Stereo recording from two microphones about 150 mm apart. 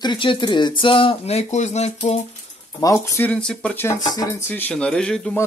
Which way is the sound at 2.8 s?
20° left (ahead or behind).